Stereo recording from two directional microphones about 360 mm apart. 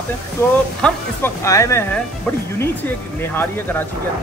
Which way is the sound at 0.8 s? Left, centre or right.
Centre.